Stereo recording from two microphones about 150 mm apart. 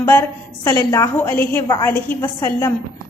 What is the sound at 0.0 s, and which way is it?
A woman's voice, 15° left (ahead or behind).